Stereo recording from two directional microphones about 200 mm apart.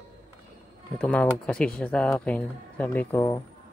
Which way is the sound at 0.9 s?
5° left (ahead or behind).